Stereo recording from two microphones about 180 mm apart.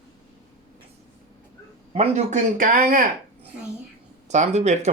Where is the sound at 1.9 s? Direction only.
40° right (ahead or behind).